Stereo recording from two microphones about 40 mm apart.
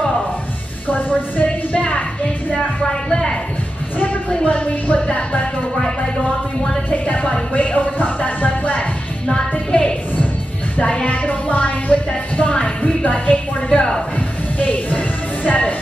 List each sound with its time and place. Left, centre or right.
0.8 s music: left
3.1 s a sound: left
4.0 s music: left
4.5 s music: left
6.9 s music: left
10.8 s music: left